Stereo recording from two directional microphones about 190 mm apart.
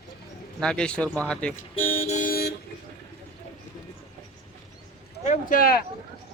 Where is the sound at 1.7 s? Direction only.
30° left (ahead or behind); by 2.5 s 50° left (ahead or behind).